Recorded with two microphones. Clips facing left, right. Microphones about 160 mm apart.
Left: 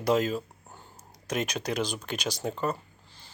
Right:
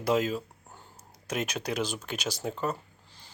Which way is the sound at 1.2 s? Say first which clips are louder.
Left 2 dB; 5° right (ahead or behind).